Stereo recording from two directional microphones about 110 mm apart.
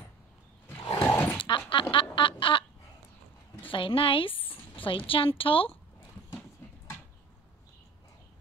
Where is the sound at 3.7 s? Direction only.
50° left (ahead or behind).